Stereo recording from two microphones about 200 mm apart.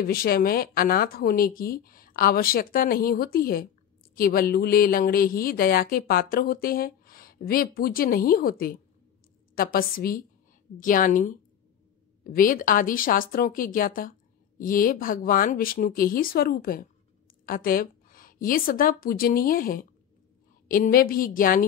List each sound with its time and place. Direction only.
0.0 s a woman's voice: 50° left (ahead or behind)